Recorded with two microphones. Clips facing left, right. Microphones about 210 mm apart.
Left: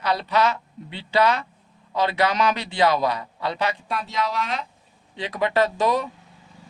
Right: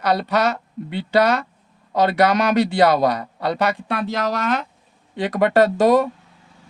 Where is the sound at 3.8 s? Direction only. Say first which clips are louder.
Right 4 dB; 70° right (ahead or behind).